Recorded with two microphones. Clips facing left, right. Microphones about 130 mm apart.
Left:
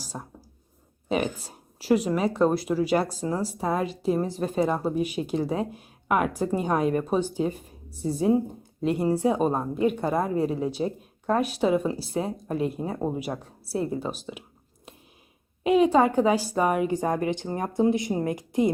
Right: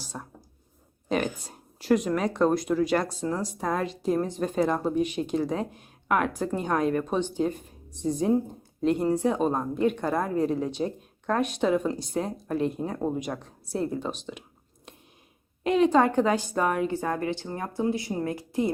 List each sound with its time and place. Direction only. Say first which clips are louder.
0.1 s a woman's voice: left 1 dB; 15° left (ahead or behind)
15.6 s speech: left 2 dB; 10° left (ahead or behind)